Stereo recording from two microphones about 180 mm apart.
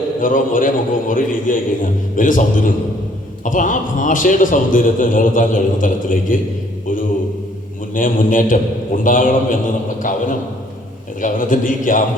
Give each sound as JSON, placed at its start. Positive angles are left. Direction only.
{"t": 0.2, "sound": "a man's voice", "side_deg": 50}
{"t": 7.9, "sound": "a man's voice", "side_deg": 50}